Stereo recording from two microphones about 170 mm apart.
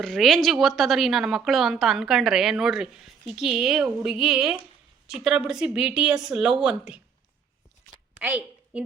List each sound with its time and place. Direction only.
0.0 s a woman's voice: centre (ahead or behind)
8.2 s a woman's voice: 10° right (ahead or behind)